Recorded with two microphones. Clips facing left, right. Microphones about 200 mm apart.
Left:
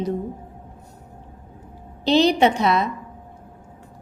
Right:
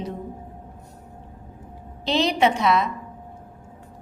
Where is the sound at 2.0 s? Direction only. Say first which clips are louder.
Left 4 dB; 35° left (ahead or behind).